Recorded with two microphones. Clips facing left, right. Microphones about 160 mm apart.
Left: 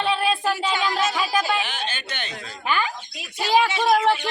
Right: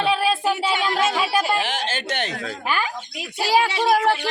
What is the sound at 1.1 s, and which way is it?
Speech, 5° right (ahead or behind).